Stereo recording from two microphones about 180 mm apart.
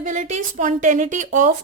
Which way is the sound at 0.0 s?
40° right (ahead or behind).